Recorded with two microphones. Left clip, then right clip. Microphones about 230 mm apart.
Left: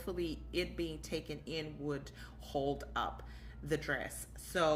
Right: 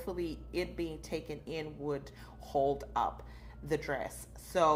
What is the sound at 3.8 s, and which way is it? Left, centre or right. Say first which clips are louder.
Speech: right 2 dB; left.